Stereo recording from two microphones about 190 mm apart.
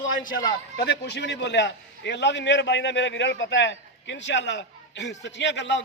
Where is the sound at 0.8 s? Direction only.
60° left (ahead or behind).